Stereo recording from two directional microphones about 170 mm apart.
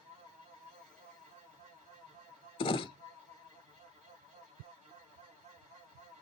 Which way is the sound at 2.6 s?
30° left (ahead or behind).